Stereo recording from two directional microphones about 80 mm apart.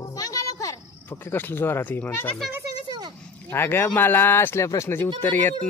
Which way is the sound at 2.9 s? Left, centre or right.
Right.